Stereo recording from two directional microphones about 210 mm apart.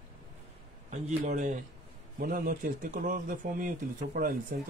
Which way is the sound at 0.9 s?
35° right (ahead or behind).